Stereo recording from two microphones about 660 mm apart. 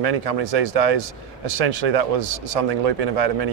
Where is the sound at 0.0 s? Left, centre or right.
Right.